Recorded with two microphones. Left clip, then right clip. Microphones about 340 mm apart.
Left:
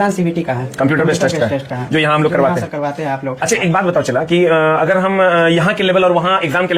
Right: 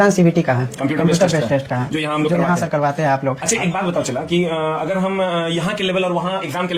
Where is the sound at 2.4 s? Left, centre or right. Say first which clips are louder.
Left 1 dB; right.